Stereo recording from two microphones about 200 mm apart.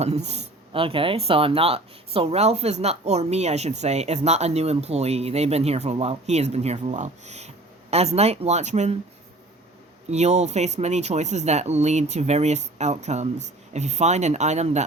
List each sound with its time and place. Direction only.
0.0 s speech: 35° right (ahead or behind)
10.1 s speech: 35° right (ahead or behind)